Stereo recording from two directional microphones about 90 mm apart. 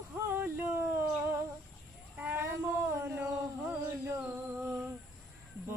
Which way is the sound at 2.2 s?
25° right (ahead or behind).